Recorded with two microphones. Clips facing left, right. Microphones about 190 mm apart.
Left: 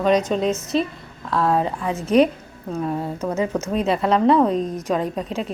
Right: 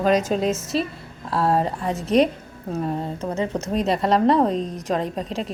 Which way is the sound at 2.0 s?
Centre (ahead or behind).